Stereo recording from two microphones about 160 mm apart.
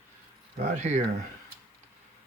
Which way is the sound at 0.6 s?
45° right (ahead or behind).